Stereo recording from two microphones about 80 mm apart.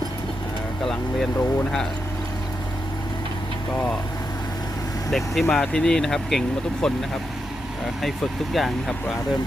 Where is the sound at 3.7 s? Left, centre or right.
Centre.